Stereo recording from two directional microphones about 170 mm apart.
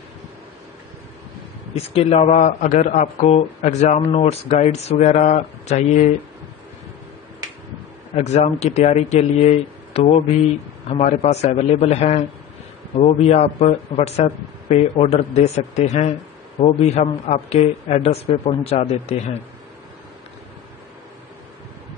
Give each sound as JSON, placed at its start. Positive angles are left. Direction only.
{"t": 1.8, "sound": "a man's voice", "side_deg": 35}
{"t": 8.1, "sound": "a man's voice", "side_deg": 40}